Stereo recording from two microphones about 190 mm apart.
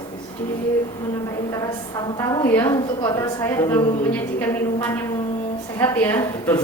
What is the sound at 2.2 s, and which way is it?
A man's voice, 15° left (ahead or behind).